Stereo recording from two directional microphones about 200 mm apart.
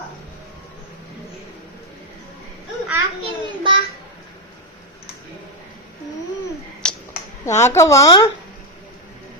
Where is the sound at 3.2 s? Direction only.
25° right (ahead or behind).